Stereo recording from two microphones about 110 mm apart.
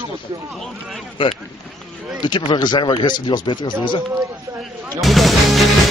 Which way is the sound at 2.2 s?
40° left (ahead or behind).